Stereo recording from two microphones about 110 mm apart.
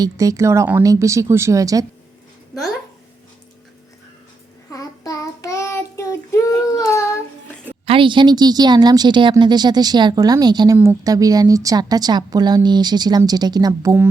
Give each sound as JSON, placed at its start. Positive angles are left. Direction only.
{"t": 0.0, "sound": "speech", "side_deg": -30}
{"t": 4.7, "sound": "child singing", "side_deg": 30}
{"t": 7.9, "sound": "a woman's voice", "side_deg": -50}